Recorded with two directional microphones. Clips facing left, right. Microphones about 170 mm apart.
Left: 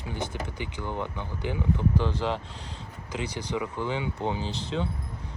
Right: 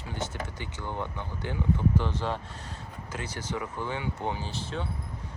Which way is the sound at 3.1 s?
15° left (ahead or behind).